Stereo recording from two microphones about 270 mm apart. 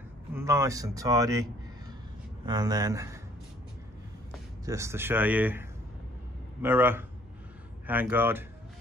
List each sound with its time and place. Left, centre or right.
0.3 s speech: centre
4.6 s speech: centre